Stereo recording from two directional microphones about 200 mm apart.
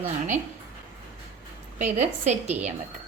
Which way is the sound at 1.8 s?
35° right (ahead or behind).